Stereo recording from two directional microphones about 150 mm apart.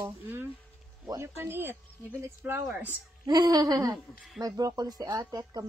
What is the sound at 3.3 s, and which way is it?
Speech, 25° right (ahead or behind).